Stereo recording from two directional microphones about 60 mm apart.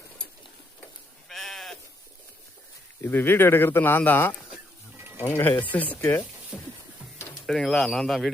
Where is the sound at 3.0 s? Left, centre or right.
Left.